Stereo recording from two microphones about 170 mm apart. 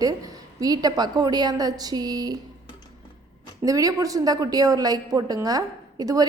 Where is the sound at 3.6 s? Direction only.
20° right (ahead or behind).